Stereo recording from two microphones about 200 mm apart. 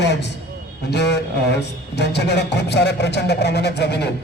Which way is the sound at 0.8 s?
55° left (ahead or behind).